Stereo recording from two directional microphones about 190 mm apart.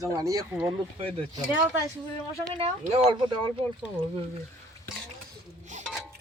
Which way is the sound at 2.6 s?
30° right (ahead or behind).